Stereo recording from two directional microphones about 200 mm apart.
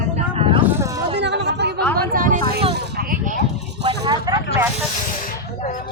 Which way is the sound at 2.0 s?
45° right (ahead or behind).